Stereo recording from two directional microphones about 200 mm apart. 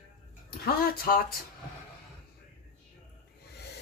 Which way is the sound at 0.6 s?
50° left (ahead or behind).